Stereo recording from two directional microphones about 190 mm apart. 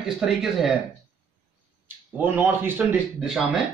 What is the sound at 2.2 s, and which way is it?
Speech, 10° right (ahead or behind).